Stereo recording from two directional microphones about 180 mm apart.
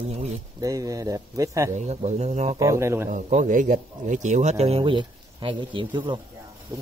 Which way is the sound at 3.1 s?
45° right (ahead or behind).